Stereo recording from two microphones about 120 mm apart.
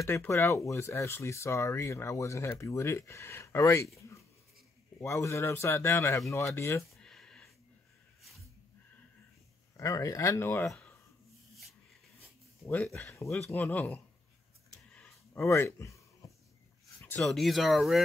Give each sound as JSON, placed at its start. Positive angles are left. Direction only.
{"t": 0.0, "sound": "speech", "side_deg": 20}
{"t": 5.0, "sound": "speech", "side_deg": 25}
{"t": 6.9, "sound": "a sound", "side_deg": 5}
{"t": 9.8, "sound": "speech", "side_deg": 25}
{"t": 12.9, "sound": "speech", "side_deg": 25}
{"t": 13.5, "sound": "speech", "side_deg": 15}
{"t": 15.3, "sound": "a sound", "side_deg": 25}
{"t": 17.2, "sound": "speech", "side_deg": 0}